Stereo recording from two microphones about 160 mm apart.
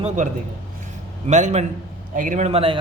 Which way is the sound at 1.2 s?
45° right (ahead or behind).